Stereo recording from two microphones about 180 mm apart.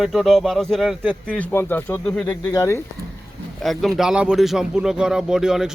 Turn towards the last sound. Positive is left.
turn(degrees=-5)  # may be behind; listen again after turning